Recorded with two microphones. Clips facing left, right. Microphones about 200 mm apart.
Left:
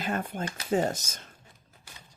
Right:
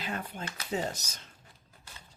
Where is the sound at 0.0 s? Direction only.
50° left (ahead or behind).